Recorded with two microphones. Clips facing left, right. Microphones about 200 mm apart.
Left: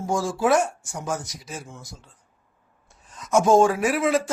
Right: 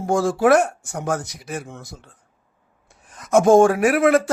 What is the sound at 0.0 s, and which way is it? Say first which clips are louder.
A man's voice: right 5 dB; 60° right (ahead or behind).